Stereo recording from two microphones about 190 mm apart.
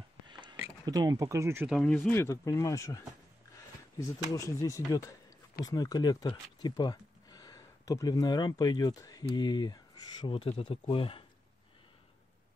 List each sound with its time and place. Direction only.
0.3 s a sound: 25° right (ahead or behind)
0.8 s speech: 20° right (ahead or behind)
1.8 s speech: 5° left (ahead or behind)
4.0 s speech: 15° left (ahead or behind)